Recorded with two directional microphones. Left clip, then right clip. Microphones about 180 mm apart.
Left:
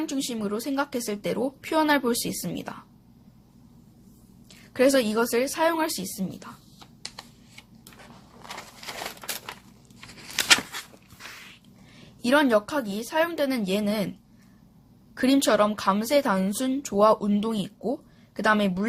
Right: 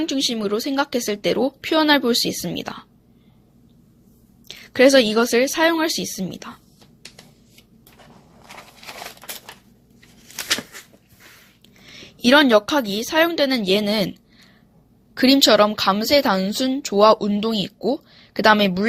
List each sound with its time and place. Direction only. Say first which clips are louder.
0.0 s a woman's voice: right 8 dB; 25° right (ahead or behind)
4.4 s a woman's voice: right 7 dB; 30° right (ahead or behind)
10.3 s a sound: left 4 dB; 20° left (ahead or behind)
11.9 s a woman's voice: right 7 dB; 35° right (ahead or behind)
15.1 s a woman's voice: right 7 dB; 25° right (ahead or behind)